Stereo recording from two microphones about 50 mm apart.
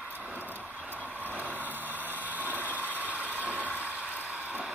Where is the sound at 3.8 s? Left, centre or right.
Right.